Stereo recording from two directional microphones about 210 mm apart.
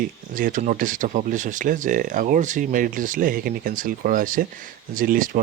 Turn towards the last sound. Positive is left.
turn(degrees=-40)  # may be behind; listen again after turning